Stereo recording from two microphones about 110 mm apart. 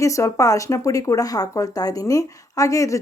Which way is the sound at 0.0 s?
30° left (ahead or behind).